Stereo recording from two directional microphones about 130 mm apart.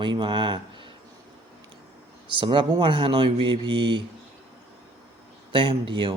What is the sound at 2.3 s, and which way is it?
Speech, 40° right (ahead or behind).